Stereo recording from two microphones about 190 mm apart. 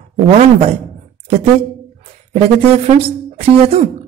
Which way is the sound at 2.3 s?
35° right (ahead or behind).